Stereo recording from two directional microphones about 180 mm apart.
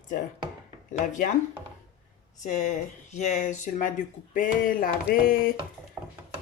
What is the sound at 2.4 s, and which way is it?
Speech, 40° left (ahead or behind).